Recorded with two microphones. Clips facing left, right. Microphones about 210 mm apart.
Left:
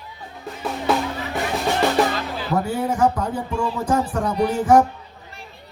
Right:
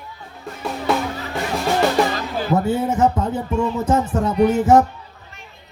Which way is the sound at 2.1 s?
45° right (ahead or behind).